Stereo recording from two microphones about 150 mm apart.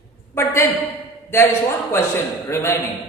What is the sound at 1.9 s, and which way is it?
Speech, 15° left (ahead or behind).